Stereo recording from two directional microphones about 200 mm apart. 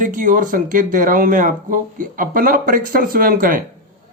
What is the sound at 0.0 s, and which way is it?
Speech, 45° right (ahead or behind).